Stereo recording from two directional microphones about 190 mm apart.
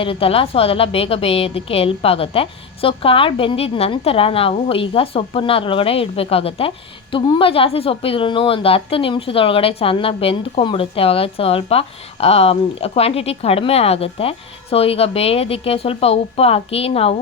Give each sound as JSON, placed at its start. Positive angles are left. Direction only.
{"t": 0.0, "sound": "a woman's voice", "side_deg": 30}